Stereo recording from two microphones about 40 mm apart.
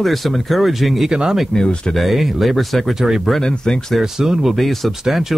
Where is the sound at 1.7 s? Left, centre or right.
Left.